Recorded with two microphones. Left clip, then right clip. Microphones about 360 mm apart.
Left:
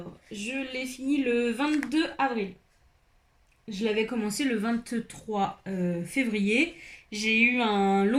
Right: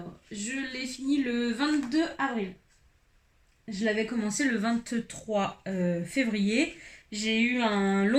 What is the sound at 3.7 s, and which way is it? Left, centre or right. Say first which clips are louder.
Speech: left 1 dB; centre.